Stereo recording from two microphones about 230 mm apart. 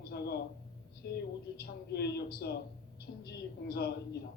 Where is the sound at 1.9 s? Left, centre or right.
Left.